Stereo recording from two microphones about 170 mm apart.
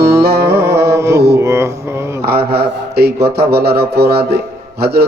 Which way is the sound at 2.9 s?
70° right (ahead or behind).